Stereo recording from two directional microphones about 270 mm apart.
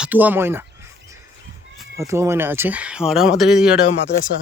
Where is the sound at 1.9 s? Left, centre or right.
Centre.